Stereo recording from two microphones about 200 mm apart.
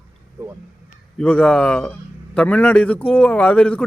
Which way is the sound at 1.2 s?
5° left (ahead or behind).